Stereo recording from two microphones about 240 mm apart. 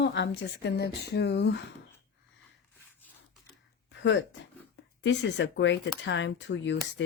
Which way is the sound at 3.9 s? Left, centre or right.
Left.